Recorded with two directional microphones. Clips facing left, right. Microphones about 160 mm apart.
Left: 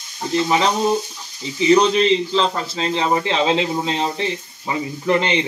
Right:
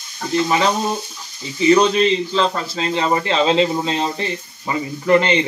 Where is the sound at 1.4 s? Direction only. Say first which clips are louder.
Right 1 dB; 20° left (ahead or behind).